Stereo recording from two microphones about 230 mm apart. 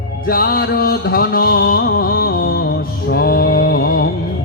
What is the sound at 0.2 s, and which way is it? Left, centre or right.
Music, left.